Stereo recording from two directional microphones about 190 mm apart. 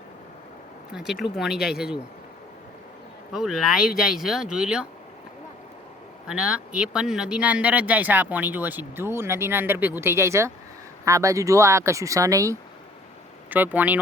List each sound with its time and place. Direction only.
0.9 s speech: centre (ahead or behind)
3.3 s speech: 5° right (ahead or behind)
6.3 s speech: 5° right (ahead or behind)